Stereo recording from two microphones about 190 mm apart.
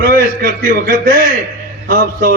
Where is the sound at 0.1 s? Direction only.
50° right (ahead or behind).